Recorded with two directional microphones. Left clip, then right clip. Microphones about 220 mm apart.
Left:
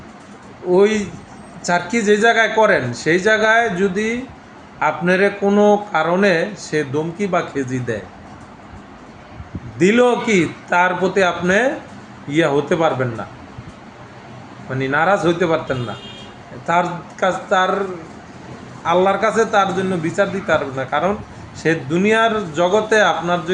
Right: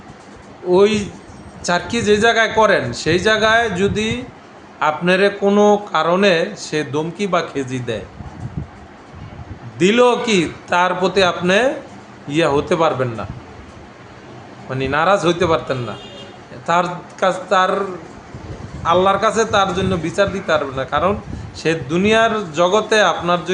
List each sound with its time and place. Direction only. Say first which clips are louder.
0.7 s a man's voice: right 1 dB; 5° right (ahead or behind)
9.7 s a man's voice: right 1 dB; 5° right (ahead or behind)
14.7 s a man's voice: right 1 dB; 10° right (ahead or behind)
18.9 s a man's voice: right 1 dB; 5° right (ahead or behind)